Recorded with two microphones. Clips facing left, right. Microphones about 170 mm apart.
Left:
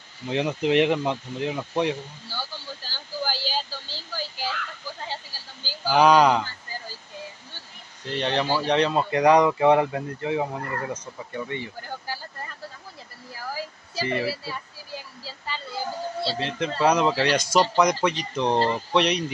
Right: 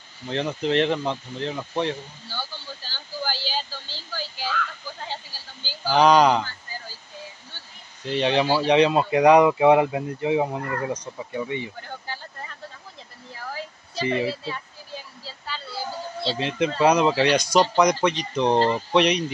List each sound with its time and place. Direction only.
0.3 s speech: 10° left (ahead or behind)
3.3 s a sound: 40° left (ahead or behind)
5.9 s speech: 5° left (ahead or behind)
8.1 s speech: 15° right (ahead or behind)
13.3 s a sound: 5° left (ahead or behind)
14.0 s speech: 20° right (ahead or behind)
14.3 s speech: 10° left (ahead or behind)
15.2 s a sound: 15° left (ahead or behind)
16.3 s speech: 15° right (ahead or behind)
16.7 s speech: centre (ahead or behind)